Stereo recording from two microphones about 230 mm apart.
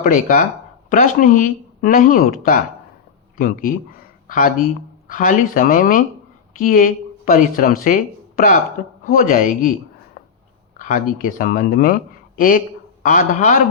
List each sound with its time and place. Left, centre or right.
0.0 s speech: left
10.2 s a sound: left
10.8 s a woman's voice: left